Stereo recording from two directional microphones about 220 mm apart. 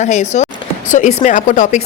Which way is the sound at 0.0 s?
30° left (ahead or behind).